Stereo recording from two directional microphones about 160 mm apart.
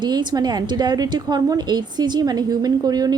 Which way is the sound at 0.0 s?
30° right (ahead or behind).